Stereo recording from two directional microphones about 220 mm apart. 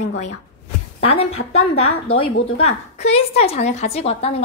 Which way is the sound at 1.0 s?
30° left (ahead or behind).